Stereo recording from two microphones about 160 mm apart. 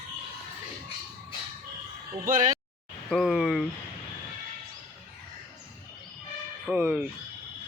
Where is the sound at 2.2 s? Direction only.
55° right (ahead or behind).